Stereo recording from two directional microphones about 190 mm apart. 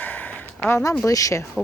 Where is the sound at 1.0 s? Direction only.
15° left (ahead or behind).